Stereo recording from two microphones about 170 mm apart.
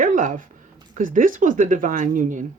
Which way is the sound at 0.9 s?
50° right (ahead or behind).